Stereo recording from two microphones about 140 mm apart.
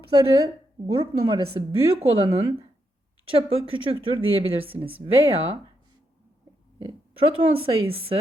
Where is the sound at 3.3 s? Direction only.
45° right (ahead or behind).